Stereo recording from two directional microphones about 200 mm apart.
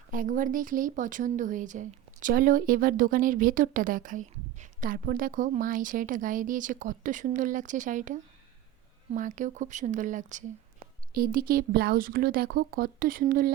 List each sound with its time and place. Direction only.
0.1 s speech: 40° right (ahead or behind)